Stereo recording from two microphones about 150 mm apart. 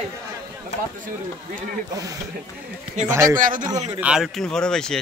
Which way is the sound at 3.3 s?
65° right (ahead or behind).